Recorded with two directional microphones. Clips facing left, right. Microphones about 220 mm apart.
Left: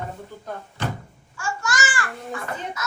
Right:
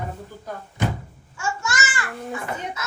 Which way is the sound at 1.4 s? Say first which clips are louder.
Even; 25° right (ahead or behind).